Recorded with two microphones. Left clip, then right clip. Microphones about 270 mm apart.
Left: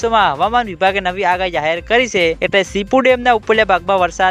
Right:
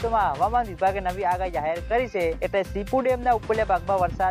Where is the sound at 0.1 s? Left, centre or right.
Left.